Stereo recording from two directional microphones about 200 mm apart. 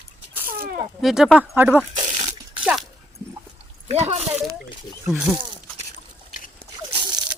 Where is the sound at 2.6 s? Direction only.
Centre (ahead or behind).